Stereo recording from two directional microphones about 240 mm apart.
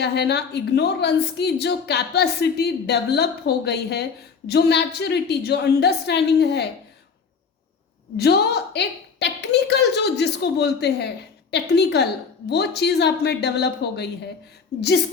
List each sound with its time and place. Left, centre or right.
0.0 s a woman's voice: left
8.1 s a woman's voice: left